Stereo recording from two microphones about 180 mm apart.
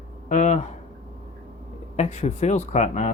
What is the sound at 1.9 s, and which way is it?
Speech, 40° left (ahead or behind).